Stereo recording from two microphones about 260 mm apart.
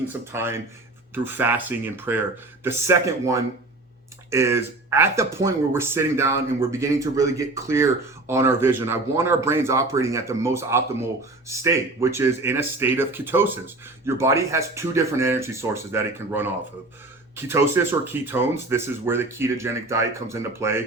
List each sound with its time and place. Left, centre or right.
0.1 s speech: centre